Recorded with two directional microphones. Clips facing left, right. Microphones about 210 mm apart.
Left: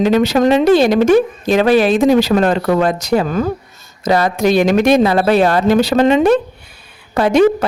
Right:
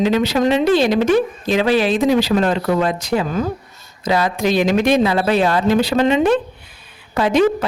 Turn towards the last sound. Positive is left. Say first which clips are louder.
# left 4 dB
turn(degrees=65)  # may be behind; listen again after turning